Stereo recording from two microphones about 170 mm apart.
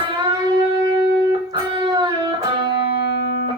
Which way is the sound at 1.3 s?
25° right (ahead or behind).